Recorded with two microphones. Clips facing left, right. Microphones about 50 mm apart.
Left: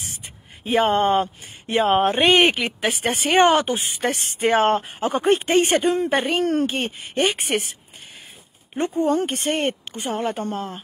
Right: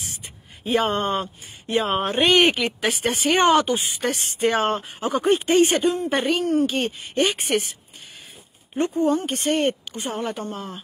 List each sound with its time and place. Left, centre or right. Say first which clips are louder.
0.0 s speech: even; left
8.7 s speech: even; left
9.0 s speech: left 2 dB; left